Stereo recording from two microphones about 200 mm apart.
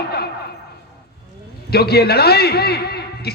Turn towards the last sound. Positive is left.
turn(degrees=55)  # may be behind; listen again after turning